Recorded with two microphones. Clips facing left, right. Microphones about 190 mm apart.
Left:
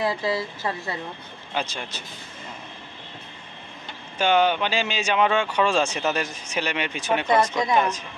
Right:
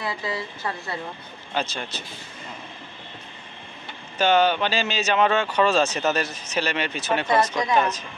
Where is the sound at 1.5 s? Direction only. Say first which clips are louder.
Right 1 dB; 10° left (ahead or behind).